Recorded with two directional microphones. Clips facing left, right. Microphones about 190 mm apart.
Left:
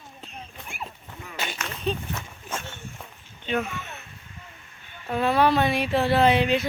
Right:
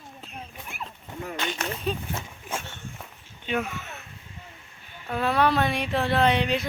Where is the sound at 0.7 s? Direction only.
Centre (ahead or behind).